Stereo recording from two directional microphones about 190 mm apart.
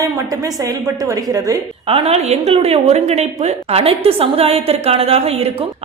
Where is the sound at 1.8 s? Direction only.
30° right (ahead or behind).